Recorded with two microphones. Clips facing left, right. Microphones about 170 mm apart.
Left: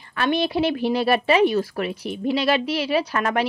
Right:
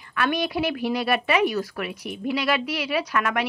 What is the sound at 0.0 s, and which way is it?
Speech, 30° left (ahead or behind).